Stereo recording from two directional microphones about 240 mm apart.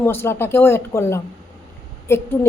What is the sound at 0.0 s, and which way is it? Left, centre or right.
A woman's voice, centre.